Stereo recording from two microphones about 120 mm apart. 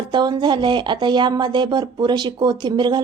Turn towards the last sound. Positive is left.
turn(degrees=-40)  # may be behind; listen again after turning